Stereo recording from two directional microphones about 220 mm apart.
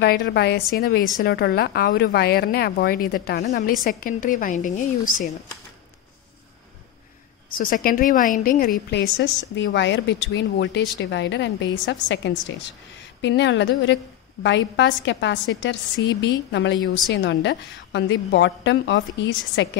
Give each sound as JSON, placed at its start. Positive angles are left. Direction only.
{"t": 0.0, "sound": "a woman's voice", "side_deg": 45}
{"t": 7.5, "sound": "a woman's voice", "side_deg": 40}